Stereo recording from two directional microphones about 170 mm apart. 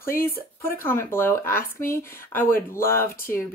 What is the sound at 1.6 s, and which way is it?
Speech, 55° left (ahead or behind).